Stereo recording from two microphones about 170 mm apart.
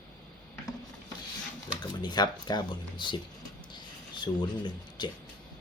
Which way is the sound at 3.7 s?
25° left (ahead or behind).